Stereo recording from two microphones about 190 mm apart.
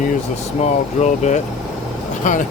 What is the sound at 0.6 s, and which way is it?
Speech, 35° left (ahead or behind).